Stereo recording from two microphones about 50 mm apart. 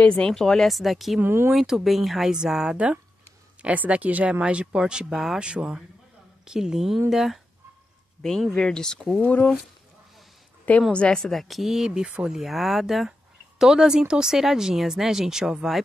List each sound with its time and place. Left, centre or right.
0.1 s speech: centre
1.2 s speech: right
1.5 s speech: centre
3.6 s speech: right
5.1 s speech: centre
5.4 s speech: right; by 7.3 s centre
8.2 s speech: centre
9.2 s speech: left
10.9 s a woman's voice: left
11.1 s speech: centre